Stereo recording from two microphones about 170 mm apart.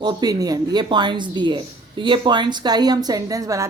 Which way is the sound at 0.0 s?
25° right (ahead or behind).